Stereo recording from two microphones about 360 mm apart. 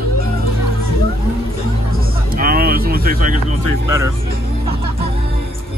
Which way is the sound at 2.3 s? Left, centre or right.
Right.